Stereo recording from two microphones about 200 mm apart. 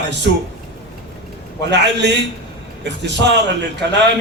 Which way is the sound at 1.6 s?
60° right (ahead or behind).